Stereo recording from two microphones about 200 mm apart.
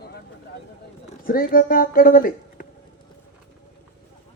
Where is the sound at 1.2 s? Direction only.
45° left (ahead or behind).